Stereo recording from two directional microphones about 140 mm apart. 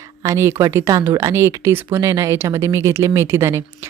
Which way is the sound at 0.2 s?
20° right (ahead or behind).